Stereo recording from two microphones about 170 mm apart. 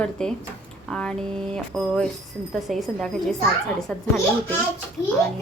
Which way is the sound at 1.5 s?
5° left (ahead or behind).